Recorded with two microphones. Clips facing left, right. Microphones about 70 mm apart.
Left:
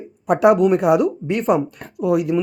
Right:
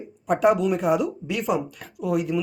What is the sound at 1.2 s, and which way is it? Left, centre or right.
Speech, left.